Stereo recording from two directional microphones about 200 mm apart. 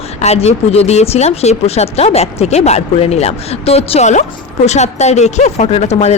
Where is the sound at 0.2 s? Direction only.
30° left (ahead or behind).